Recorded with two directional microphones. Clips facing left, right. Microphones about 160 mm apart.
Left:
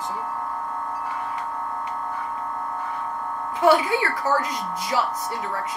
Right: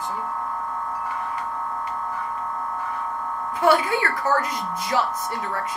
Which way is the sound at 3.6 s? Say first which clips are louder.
Left 1 dB; 15° left (ahead or behind).